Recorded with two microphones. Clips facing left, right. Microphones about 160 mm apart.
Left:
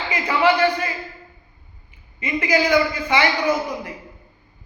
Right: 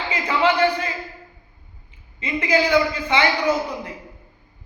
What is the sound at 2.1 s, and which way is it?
Speech, 25° right (ahead or behind).